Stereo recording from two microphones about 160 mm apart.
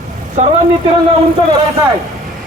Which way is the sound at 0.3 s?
40° right (ahead or behind).